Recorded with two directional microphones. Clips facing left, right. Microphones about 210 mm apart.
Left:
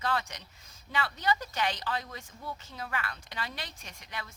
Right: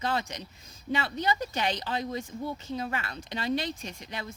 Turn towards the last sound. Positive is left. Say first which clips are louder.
# right 5 dB
turn(degrees=-25)  # may be behind; listen again after turning